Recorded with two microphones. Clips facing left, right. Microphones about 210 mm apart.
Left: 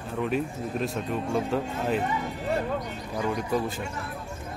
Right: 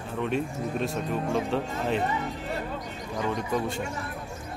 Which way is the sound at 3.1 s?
Centre (ahead or behind).